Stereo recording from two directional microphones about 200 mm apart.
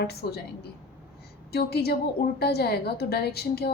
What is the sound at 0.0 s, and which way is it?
Speech, 55° left (ahead or behind).